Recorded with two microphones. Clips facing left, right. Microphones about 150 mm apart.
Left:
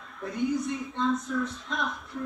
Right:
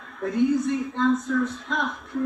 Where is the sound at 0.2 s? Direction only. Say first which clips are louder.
Right 7 dB; 50° right (ahead or behind).